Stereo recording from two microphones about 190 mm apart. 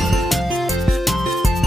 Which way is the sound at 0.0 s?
Centre (ahead or behind).